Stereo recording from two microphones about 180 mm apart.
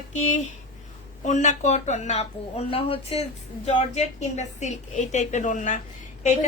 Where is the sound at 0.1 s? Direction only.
40° left (ahead or behind).